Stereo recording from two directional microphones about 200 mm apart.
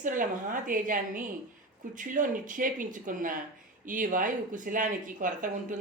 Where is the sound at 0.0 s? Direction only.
40° right (ahead or behind).